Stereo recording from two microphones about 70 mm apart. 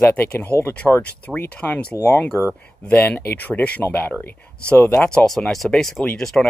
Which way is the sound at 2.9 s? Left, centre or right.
Left.